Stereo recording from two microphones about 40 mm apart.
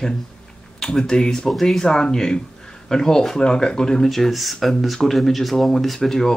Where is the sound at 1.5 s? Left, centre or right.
Centre.